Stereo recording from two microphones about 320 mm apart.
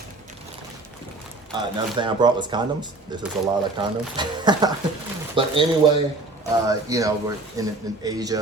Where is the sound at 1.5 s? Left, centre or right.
Centre.